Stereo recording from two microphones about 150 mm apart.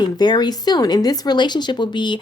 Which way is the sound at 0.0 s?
30° left (ahead or behind).